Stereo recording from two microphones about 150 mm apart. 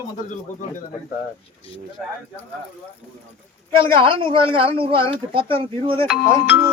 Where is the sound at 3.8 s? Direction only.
35° right (ahead or behind).